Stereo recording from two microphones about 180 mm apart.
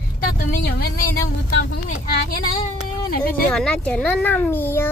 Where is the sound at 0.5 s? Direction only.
55° left (ahead or behind).